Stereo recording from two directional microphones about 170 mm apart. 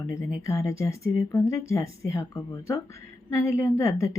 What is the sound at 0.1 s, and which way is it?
A woman's voice, 20° left (ahead or behind).